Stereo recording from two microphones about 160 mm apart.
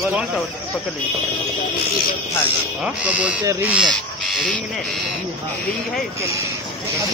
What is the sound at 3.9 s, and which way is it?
Crow, 5° left (ahead or behind).